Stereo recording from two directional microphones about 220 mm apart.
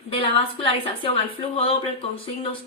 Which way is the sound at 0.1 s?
25° left (ahead or behind).